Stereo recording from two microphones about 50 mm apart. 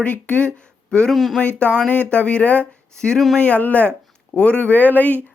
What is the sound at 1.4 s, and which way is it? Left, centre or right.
Speech, left.